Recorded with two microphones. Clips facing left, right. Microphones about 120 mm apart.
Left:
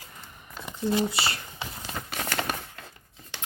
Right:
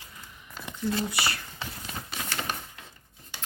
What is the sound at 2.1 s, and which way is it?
Typewriter, 60° left (ahead or behind).